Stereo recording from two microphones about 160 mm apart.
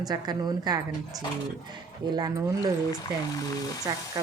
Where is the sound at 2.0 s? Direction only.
25° right (ahead or behind).